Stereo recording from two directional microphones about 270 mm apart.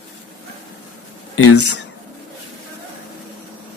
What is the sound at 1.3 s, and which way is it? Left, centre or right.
Speech, left.